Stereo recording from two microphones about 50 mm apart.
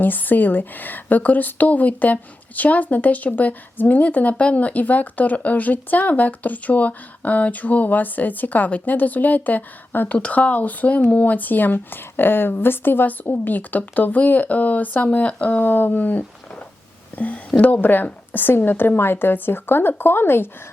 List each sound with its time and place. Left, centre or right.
0.0 s speech: left
10.2 s a woman's voice: left